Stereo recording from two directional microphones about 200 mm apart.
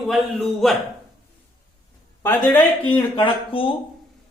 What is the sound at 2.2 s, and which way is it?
Speech, 10° left (ahead or behind).